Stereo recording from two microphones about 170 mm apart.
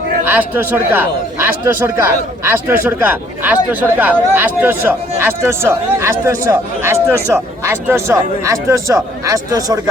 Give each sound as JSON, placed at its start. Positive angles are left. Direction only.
{"t": 0.3, "sound": "speech", "side_deg": -10}